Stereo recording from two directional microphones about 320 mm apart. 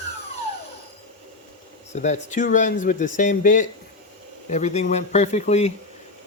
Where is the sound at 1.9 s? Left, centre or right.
Left.